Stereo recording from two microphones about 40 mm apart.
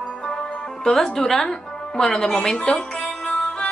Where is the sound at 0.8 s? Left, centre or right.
Centre.